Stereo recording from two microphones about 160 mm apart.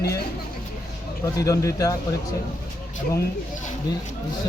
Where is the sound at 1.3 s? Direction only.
20° left (ahead or behind).